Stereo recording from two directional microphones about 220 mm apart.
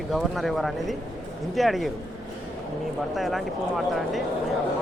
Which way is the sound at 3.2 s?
Centre (ahead or behind).